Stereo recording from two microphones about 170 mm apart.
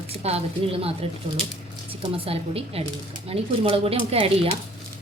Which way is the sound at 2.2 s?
35° right (ahead or behind).